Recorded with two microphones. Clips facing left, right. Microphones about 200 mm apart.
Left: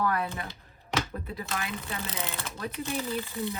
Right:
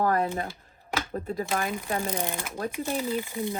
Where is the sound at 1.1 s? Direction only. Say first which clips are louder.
Right 6 dB; 45° right (ahead or behind).